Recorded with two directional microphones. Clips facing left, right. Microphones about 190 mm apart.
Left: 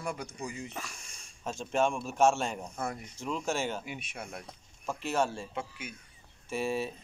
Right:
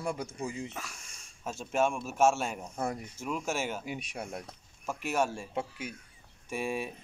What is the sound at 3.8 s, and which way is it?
Speech, 35° right (ahead or behind).